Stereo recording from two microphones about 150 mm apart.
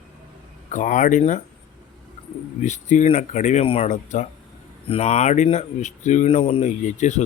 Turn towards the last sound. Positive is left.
turn(degrees=50)  # may be behind; listen again after turning